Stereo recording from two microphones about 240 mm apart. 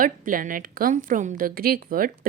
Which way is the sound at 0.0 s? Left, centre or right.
Right.